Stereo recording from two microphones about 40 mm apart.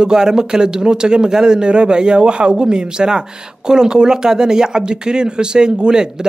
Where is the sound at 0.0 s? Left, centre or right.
Centre.